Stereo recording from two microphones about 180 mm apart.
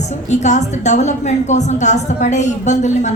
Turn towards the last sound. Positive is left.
turn(degrees=40)  # may be behind; listen again after turning